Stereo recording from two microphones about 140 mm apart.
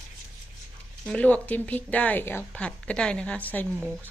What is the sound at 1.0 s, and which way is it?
Speech, 10° left (ahead or behind).